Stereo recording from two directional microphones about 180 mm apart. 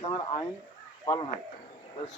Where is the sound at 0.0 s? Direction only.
20° left (ahead or behind).